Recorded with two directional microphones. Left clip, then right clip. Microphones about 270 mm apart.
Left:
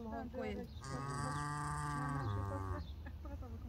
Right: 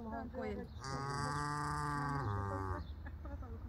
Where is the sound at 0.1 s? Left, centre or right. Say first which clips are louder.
Right 1 dB; left.